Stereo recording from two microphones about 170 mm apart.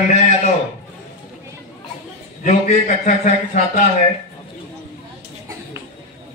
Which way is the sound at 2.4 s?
50° left (ahead or behind).